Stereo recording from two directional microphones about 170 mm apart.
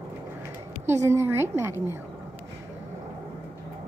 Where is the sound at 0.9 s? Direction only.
15° right (ahead or behind).